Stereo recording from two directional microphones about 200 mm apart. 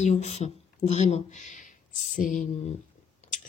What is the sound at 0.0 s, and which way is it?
Speech, 35° left (ahead or behind).